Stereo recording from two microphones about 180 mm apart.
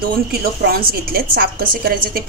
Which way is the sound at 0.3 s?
55° right (ahead or behind).